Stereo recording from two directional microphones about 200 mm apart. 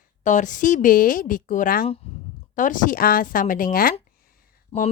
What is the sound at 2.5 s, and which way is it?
A woman's voice, 40° left (ahead or behind).